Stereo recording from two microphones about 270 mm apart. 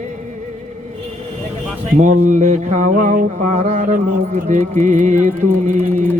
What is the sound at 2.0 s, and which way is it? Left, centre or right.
Music, right.